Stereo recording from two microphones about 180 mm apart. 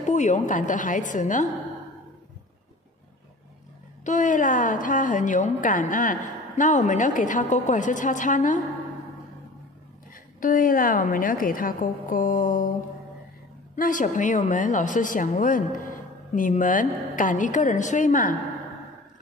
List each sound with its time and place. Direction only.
0.0 s a woman's voice: 40° left (ahead or behind)
4.0 s a woman's voice: 45° left (ahead or behind)
10.4 s a woman's voice: 50° left (ahead or behind)
13.7 s a woman's voice: 45° left (ahead or behind)